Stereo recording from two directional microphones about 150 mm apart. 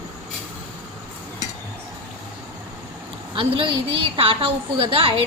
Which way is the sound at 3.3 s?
35° right (ahead or behind).